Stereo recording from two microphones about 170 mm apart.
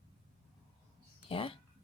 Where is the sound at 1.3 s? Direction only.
30° left (ahead or behind).